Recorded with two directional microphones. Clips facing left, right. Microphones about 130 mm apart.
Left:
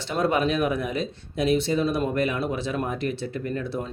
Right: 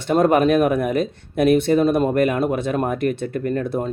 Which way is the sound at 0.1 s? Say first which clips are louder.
Right 8 dB; 50° right (ahead or behind).